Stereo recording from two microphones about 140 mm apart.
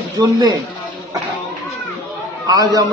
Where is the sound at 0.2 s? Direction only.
30° right (ahead or behind).